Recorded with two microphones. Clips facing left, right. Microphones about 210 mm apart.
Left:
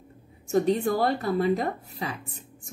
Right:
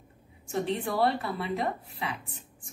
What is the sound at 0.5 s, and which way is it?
A woman's voice, 40° left (ahead or behind).